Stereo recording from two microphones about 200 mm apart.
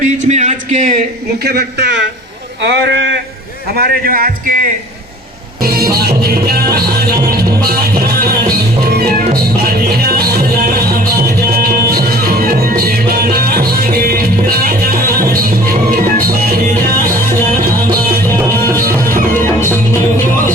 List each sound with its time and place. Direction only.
0.0 s speech: 35° right (ahead or behind)
1.5 s a man's voice: 55° right (ahead or behind)
3.8 s speech: 50° right (ahead or behind)
5.6 s music: 50° right (ahead or behind)
9.6 s music: 50° right (ahead or behind)
11.5 s music: 50° right (ahead or behind)
19.3 s music: 10° left (ahead or behind)